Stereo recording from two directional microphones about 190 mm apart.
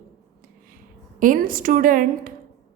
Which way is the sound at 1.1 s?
45° right (ahead or behind).